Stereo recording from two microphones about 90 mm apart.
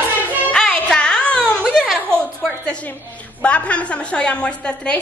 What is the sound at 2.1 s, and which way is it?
A woman's voice, 10° left (ahead or behind).